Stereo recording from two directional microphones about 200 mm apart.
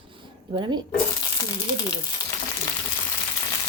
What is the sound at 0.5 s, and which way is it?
Speech, 20° right (ahead or behind).